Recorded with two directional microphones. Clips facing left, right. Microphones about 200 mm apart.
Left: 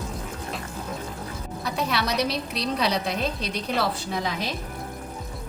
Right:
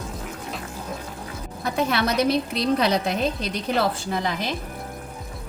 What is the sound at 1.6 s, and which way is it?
A woman's voice, 50° right (ahead or behind).